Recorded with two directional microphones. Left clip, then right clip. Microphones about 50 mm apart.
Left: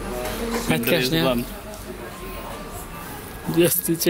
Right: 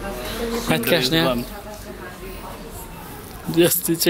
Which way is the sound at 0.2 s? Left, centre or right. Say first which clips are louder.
Even; right.